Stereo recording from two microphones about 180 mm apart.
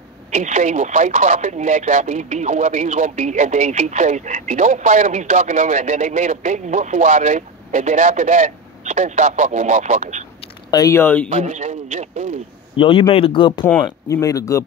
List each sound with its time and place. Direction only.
0.3 s speech: 40° right (ahead or behind)
10.4 s speech: 20° left (ahead or behind)
11.2 s radio: 40° right (ahead or behind)
12.7 s speech: 30° left (ahead or behind)